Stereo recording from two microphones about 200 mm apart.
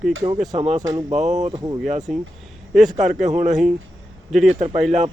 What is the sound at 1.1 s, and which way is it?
Speech, 35° right (ahead or behind).